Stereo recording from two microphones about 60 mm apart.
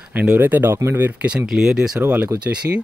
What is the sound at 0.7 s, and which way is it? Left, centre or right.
Speech, right.